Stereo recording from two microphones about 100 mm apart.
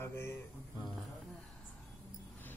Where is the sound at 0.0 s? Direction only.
25° left (ahead or behind).